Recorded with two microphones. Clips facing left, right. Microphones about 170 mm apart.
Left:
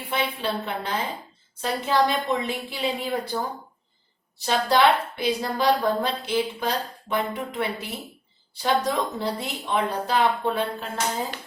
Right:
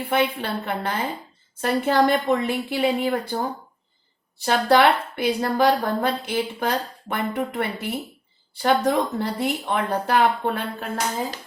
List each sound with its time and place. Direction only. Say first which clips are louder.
0.0 s a woman's voice: right 4 dB; 55° right (ahead or behind)
4.4 s a woman's voice: right 3 dB; 55° right (ahead or behind)